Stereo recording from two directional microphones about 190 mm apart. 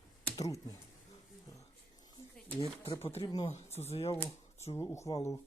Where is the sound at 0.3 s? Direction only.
20° left (ahead or behind).